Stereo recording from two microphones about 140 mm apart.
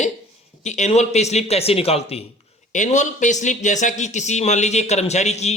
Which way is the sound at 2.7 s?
60° left (ahead or behind).